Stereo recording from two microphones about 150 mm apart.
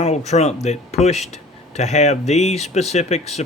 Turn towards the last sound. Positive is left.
turn(degrees=45)  # may be behind; listen again after turning